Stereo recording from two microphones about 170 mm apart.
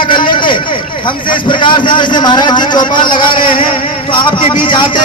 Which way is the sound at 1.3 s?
30° left (ahead or behind).